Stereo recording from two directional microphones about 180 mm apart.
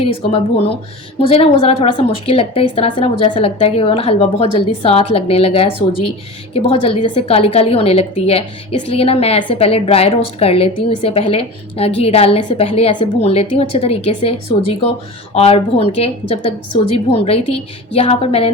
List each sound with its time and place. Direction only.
0.0 s a woman's voice: 35° left (ahead or behind)